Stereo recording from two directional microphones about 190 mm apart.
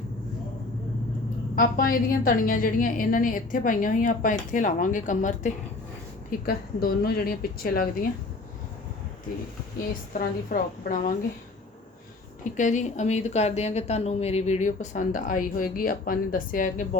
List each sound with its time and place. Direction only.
1.5 s a woman's voice: 50° left (ahead or behind)
10.1 s a woman's voice: 45° left (ahead or behind)
12.5 s speech: 40° left (ahead or behind)